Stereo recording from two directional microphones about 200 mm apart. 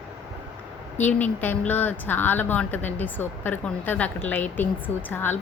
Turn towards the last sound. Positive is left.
turn(degrees=10)  # may be behind; listen again after turning